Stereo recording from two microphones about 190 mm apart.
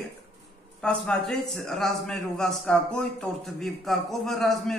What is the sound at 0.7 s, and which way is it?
A man's voice, 5° left (ahead or behind).